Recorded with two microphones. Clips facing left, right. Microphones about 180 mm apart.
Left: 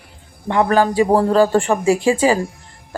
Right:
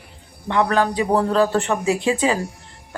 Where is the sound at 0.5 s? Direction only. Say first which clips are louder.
Left 3 dB; 50° left (ahead or behind).